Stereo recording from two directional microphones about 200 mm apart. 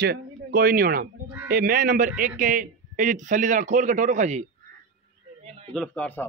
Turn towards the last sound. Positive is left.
turn(degrees=10)  # may be behind; listen again after turning